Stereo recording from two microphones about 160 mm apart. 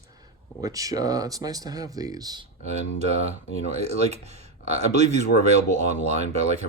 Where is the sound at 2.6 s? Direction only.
40° right (ahead or behind).